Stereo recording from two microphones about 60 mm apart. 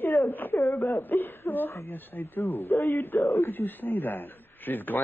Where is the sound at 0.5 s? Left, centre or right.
Left.